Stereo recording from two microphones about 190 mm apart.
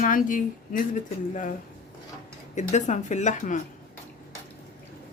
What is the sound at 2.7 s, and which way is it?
Speech, 40° left (ahead or behind).